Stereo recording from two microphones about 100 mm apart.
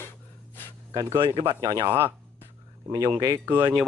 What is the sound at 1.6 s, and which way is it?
Speech, 40° right (ahead or behind).